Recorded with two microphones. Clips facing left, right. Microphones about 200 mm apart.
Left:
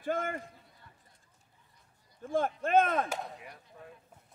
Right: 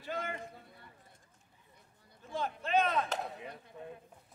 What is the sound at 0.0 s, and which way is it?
Chop, 50° left (ahead or behind).